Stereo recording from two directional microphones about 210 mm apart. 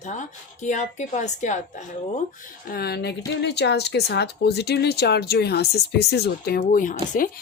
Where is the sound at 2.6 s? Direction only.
45° left (ahead or behind).